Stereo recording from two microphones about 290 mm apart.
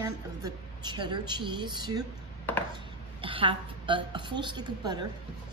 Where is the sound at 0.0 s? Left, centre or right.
Centre.